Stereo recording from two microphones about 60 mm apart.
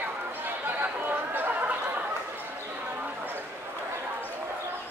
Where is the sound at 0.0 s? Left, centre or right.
Right.